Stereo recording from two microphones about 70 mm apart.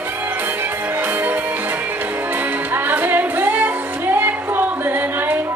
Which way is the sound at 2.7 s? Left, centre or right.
Right.